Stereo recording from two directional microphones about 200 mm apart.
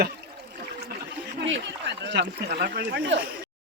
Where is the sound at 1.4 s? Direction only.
65° right (ahead or behind).